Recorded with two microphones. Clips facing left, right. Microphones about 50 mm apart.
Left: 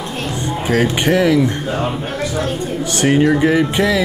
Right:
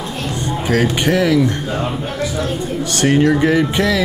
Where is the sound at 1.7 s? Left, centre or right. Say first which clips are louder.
Left 1 dB; centre.